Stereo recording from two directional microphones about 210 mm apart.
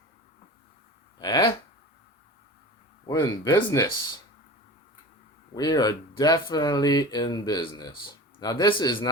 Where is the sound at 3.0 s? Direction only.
20° left (ahead or behind).